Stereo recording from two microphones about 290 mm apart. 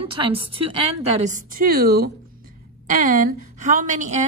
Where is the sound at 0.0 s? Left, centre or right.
Centre.